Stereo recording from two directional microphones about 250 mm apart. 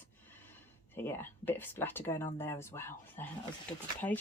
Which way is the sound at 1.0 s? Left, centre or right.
Centre.